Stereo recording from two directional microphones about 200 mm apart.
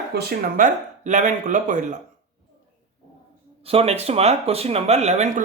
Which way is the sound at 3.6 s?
30° right (ahead or behind).